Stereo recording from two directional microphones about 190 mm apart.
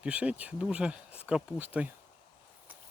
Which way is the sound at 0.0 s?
5° right (ahead or behind).